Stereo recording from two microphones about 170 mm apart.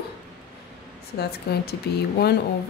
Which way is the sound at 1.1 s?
70° left (ahead or behind).